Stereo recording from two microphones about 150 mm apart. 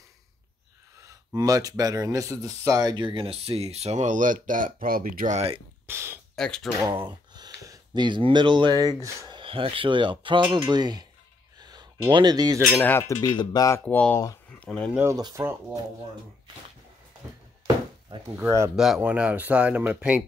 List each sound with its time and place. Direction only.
1.0 s speech: 25° right (ahead or behind); by 5.3 s 70° right (ahead or behind)
5.3 s speech: 40° right (ahead or behind)
5.9 s speech: 15° right (ahead or behind)
6.3 s speech: 5° left (ahead or behind)
6.8 s speech: 30° right (ahead or behind)
9.4 s speech: 35° right (ahead or behind)
11.5 s a sound: 30° right (ahead or behind)
12.8 s cutlery: 15° left (ahead or behind)
13.8 s speech: 10° left (ahead or behind)
15.0 s speech: 20° right (ahead or behind)
18.3 s speech: 15° right (ahead or behind)